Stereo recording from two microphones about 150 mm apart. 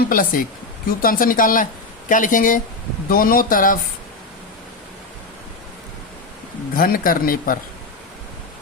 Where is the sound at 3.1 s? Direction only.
70° left (ahead or behind).